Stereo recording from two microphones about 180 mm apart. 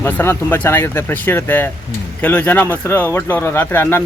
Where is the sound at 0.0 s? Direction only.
15° left (ahead or behind).